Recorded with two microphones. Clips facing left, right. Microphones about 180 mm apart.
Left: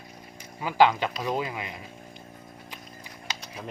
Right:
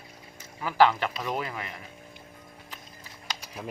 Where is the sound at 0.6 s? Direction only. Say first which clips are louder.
Left 1 dB; 15° left (ahead or behind).